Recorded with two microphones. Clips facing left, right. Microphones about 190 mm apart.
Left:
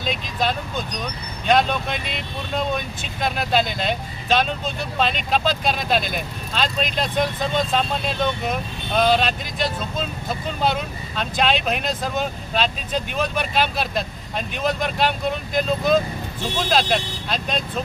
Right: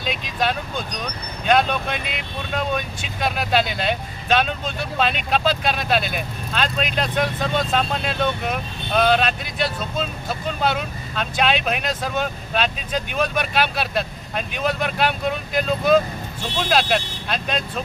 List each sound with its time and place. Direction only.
0.0 s speech: 5° right (ahead or behind)